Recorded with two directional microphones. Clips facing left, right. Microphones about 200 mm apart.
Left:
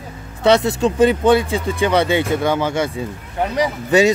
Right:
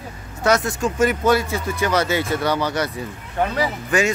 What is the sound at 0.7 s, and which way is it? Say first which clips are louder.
Speech: left 5 dB; 30° left (ahead or behind).